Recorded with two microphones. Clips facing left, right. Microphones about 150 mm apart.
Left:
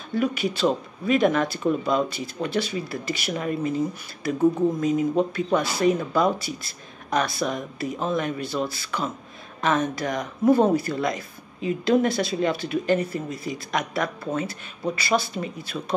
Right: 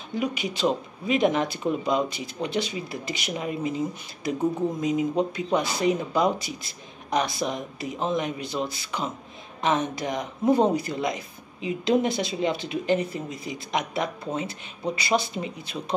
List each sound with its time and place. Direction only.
0.1 s speech: 15° right (ahead or behind)